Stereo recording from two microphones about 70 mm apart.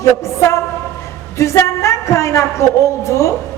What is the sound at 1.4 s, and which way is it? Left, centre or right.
A woman's voice, left.